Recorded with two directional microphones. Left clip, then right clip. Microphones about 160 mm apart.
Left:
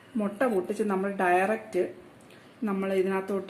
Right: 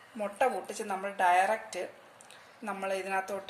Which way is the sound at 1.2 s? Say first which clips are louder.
Even; 10° left (ahead or behind).